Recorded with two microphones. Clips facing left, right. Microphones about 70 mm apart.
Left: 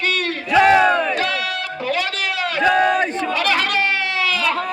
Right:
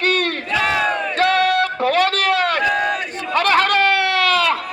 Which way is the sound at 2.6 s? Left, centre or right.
Left.